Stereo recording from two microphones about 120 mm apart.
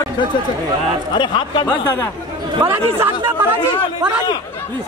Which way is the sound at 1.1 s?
40° left (ahead or behind).